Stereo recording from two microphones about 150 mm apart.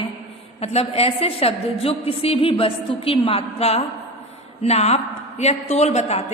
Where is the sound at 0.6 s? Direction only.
45° left (ahead or behind).